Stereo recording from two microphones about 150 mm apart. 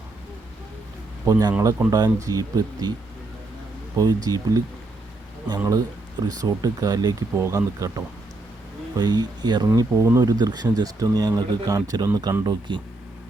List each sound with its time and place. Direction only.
1.3 s speech: 25° right (ahead or behind)
1.5 s speech: 15° right (ahead or behind)
3.9 s speech: 25° right (ahead or behind)
6.2 s speech: 25° right (ahead or behind)